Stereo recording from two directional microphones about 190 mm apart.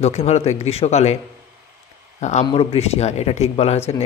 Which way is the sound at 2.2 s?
35° left (ahead or behind).